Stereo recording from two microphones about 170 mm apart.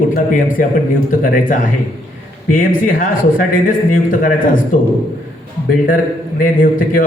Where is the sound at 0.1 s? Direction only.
55° left (ahead or behind).